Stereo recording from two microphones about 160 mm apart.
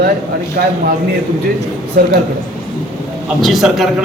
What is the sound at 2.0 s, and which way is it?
Speech, 65° right (ahead or behind).